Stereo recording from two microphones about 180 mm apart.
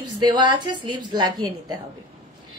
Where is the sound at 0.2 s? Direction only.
25° right (ahead or behind).